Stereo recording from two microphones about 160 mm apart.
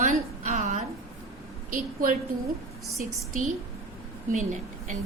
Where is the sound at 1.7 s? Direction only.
60° right (ahead or behind).